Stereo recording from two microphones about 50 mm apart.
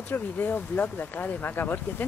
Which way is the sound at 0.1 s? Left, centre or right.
Left.